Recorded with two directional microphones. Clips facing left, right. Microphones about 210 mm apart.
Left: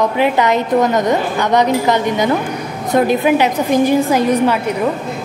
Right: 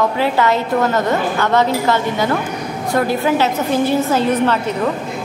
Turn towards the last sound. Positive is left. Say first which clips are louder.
# left 2 dB
turn(degrees=10)  # may be behind; listen again after turning